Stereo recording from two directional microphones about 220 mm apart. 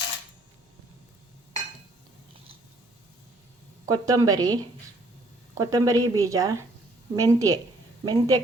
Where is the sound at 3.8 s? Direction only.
15° right (ahead or behind).